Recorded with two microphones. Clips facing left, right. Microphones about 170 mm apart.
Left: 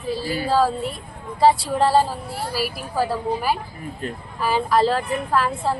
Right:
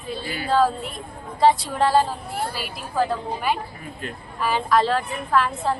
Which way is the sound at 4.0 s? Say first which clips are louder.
Left 1 dB; 35° left (ahead or behind).